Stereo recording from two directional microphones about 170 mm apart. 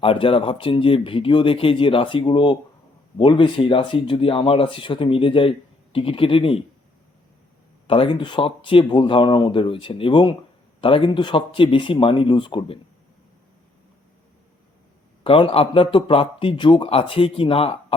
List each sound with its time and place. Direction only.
0.0 s speech: 30° left (ahead or behind)
7.9 s speech: 30° left (ahead or behind)
15.2 s speech: 30° left (ahead or behind)